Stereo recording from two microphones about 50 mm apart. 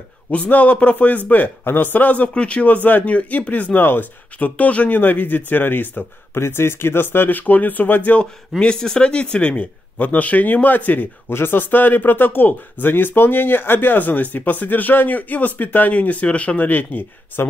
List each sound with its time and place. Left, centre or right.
0.3 s a man's voice: left
3.8 s speech: left
6.4 s speech: left
8.5 s speech: centre; by 11.1 s left
11.2 s speech: left